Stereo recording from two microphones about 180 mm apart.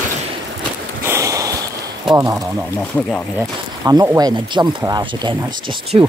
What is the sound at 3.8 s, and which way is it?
Speech, 20° right (ahead or behind).